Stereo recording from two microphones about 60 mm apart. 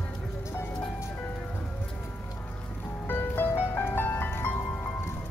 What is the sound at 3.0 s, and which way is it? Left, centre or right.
Music, left.